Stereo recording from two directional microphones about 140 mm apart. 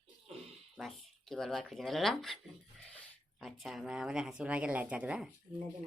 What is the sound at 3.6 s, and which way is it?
Speech, centre (ahead or behind).